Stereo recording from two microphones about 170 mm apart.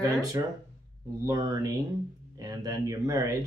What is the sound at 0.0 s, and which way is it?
Speech, 20° right (ahead or behind).